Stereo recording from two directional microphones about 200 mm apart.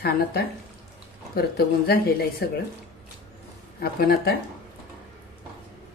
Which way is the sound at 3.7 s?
50° left (ahead or behind).